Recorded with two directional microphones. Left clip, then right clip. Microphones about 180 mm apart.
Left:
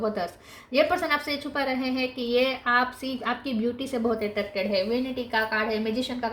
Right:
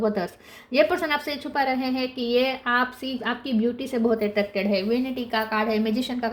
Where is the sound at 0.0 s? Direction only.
40° right (ahead or behind).